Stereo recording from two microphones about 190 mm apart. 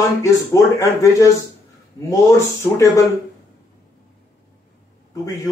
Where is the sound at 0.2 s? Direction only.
15° left (ahead or behind).